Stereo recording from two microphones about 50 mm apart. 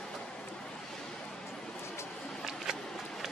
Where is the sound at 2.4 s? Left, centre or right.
Centre.